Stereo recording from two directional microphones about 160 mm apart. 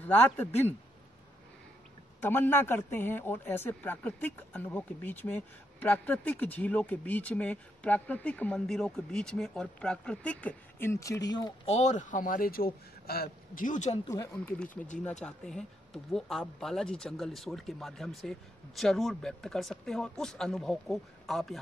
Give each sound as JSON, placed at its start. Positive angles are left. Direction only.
{"t": 0.0, "sound": "a man's voice", "side_deg": 10}
{"t": 2.2, "sound": "a man's voice", "side_deg": 15}
{"t": 11.6, "sound": "a man's voice", "side_deg": 45}
{"t": 14.0, "sound": "speech", "side_deg": 20}
{"t": 15.2, "sound": "speech", "side_deg": 5}